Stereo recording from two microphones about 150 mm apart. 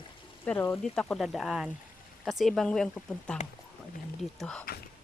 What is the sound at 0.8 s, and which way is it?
Speech, 5° left (ahead or behind).